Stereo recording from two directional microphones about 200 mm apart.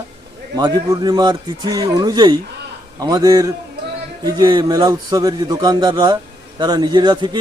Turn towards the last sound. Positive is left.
turn(degrees=-20)  # may be behind; listen again after turning